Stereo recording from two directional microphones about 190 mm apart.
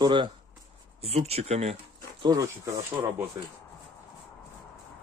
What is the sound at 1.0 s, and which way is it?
Speech, 35° right (ahead or behind).